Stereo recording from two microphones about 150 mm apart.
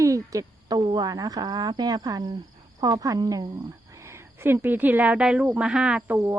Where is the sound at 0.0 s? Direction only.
20° right (ahead or behind).